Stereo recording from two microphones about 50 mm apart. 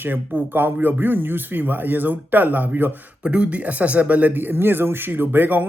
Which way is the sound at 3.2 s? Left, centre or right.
Right.